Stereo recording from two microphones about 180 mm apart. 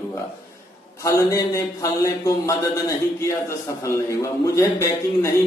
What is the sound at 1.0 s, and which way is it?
A man's voice, 15° left (ahead or behind).